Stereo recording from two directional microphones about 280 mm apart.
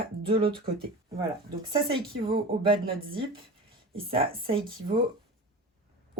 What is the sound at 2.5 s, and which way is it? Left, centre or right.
Speech, centre.